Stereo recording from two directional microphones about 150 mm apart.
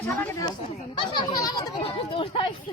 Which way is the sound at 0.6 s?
30° left (ahead or behind).